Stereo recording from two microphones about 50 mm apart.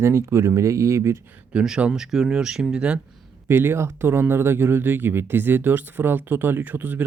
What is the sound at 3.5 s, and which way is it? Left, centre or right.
Speech, right.